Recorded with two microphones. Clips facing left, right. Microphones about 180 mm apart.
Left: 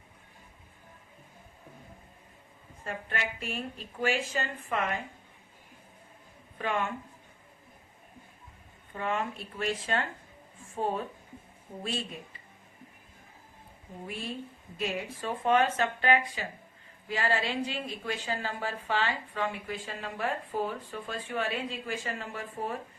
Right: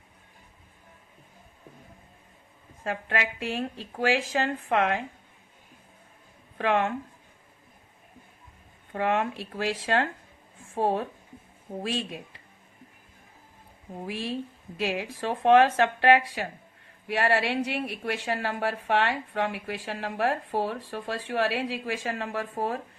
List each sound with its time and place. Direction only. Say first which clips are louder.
2.8 s a woman's voice: right 6 dB; 90° right
6.6 s speech: right 6 dB; 80° right
9.0 s speech: right 6 dB; 75° right (ahead or behind); by 10.1 s 90° right
10.8 s a woman's voice: right 5 dB; 75° right (ahead or behind)
14.1 s a woman's voice: right 6 dB; 90° right